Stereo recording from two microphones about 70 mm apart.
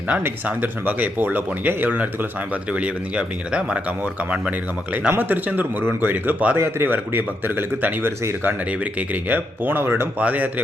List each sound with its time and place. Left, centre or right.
0.1 s speech: centre
6.6 s speech: right